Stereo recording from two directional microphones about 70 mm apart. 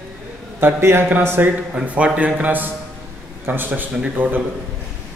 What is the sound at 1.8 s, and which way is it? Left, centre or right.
A man's voice, centre.